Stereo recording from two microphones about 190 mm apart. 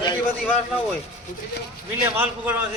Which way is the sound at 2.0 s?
10° right (ahead or behind).